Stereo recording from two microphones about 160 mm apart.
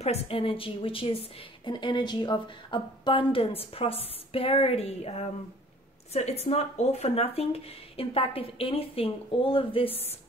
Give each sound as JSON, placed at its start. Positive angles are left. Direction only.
{"t": 0.0, "sound": "a woman's voice", "side_deg": 40}